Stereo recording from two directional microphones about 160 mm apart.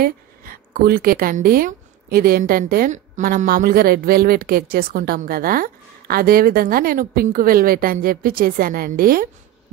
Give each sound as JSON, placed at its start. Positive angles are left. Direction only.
{"t": 0.0, "sound": "a woman's voice", "side_deg": -65}